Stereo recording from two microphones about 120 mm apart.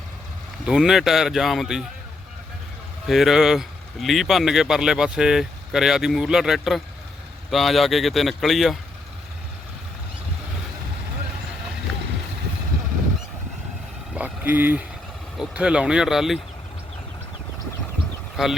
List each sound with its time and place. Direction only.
0.6 s speech: 5° right (ahead or behind)
3.1 s speech: centre (ahead or behind)
14.1 s a sound: 10° right (ahead or behind)
15.4 s speech: 10° right (ahead or behind)
18.4 s speech: centre (ahead or behind)